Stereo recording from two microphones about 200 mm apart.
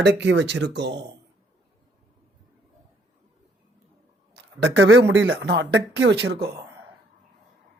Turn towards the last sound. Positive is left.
turn(degrees=-55)  # may be behind; listen again after turning